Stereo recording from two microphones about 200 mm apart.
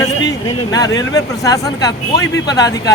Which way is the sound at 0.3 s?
20° left (ahead or behind).